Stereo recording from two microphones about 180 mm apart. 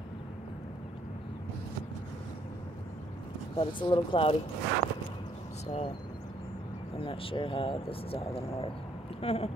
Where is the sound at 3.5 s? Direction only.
25° left (ahead or behind).